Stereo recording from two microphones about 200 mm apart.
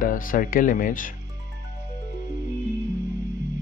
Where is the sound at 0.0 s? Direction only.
45° left (ahead or behind).